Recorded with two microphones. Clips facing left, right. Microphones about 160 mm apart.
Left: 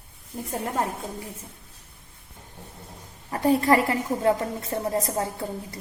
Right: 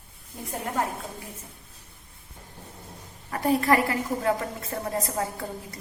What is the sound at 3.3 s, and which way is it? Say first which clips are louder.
A woman's voice: left 2 dB; 30° left (ahead or behind).